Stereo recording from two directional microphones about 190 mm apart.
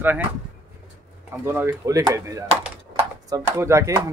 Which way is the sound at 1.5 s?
15° right (ahead or behind).